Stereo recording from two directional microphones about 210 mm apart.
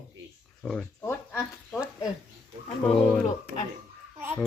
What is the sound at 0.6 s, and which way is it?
Speech, 5° left (ahead or behind).